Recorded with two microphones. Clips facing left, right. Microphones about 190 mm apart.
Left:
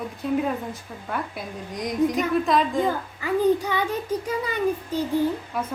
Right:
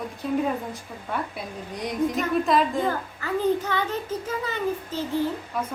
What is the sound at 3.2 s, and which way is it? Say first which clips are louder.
A child's voice: left 3 dB; 10° left (ahead or behind).